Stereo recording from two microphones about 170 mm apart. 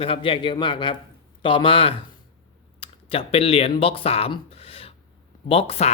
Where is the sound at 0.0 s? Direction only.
35° left (ahead or behind).